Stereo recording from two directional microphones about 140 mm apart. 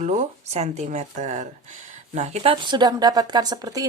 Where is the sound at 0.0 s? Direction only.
60° right (ahead or behind).